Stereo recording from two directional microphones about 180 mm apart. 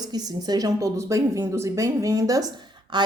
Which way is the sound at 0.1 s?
20° right (ahead or behind).